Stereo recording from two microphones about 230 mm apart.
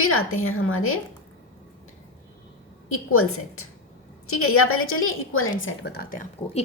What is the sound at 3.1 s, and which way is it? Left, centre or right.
A woman's voice, left.